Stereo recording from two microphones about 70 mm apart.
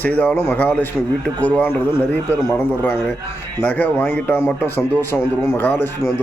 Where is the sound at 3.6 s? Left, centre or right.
Left.